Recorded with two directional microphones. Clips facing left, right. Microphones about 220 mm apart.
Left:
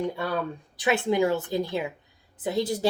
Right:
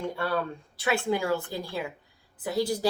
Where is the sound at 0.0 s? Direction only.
15° left (ahead or behind).